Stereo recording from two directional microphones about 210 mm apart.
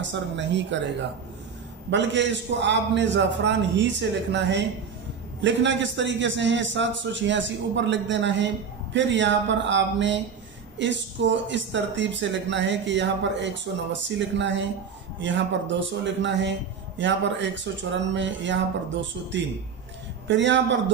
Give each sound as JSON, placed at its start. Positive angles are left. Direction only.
{"t": 0.0, "sound": "a man's voice", "side_deg": -60}
{"t": 1.9, "sound": "a man's voice", "side_deg": -55}